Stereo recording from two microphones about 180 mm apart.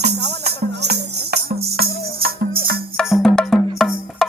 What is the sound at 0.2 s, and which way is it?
Music, 65° right (ahead or behind).